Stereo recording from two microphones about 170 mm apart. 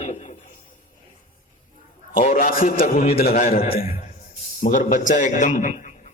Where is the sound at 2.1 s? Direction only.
55° left (ahead or behind).